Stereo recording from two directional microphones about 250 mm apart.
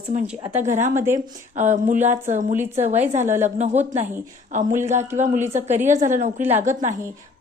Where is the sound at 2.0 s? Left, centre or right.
Right.